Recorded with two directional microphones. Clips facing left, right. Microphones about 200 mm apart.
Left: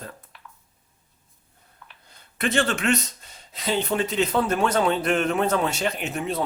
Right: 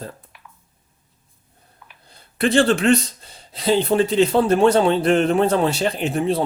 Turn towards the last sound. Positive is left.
turn(degrees=-30)  # may be behind; listen again after turning